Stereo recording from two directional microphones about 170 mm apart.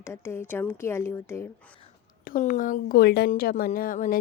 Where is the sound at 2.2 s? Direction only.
55° left (ahead or behind).